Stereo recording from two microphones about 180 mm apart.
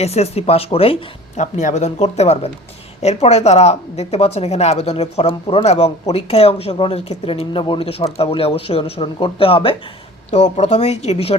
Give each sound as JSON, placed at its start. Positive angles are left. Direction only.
{"t": 0.0, "sound": "speech", "side_deg": 35}